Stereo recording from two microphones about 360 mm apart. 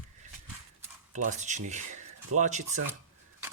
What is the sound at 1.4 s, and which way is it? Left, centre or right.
Speech, centre.